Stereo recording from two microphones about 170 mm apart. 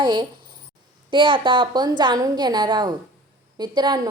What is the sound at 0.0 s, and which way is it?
A woman's voice, 30° right (ahead or behind).